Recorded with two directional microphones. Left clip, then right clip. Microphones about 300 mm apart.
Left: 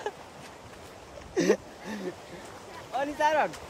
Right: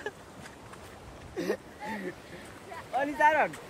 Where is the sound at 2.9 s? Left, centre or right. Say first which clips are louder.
Right 1 dB; centre.